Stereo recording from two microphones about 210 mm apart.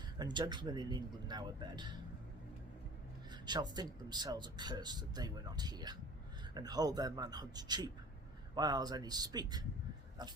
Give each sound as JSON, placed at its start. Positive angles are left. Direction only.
{"t": 0.2, "sound": "speech", "side_deg": -20}
{"t": 3.4, "sound": "speech", "side_deg": -20}